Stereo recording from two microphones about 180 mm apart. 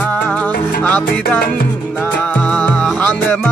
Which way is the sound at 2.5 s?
5° left (ahead or behind).